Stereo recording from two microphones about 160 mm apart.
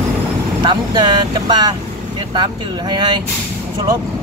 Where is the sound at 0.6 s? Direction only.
25° right (ahead or behind).